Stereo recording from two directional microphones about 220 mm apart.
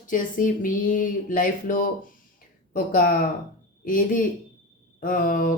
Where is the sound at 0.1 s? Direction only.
35° left (ahead or behind).